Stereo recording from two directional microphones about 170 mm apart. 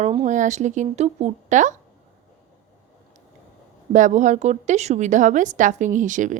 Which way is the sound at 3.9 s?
45° right (ahead or behind).